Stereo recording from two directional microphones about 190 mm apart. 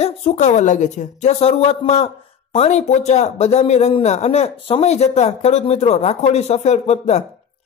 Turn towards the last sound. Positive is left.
turn(degrees=35)  # may be behind; listen again after turning